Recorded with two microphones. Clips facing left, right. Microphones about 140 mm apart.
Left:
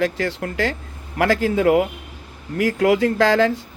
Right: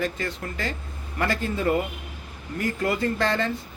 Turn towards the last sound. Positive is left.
turn(degrees=90)